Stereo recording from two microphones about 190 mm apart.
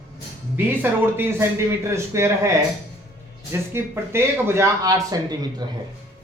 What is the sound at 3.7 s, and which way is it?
Speech, 15° right (ahead or behind).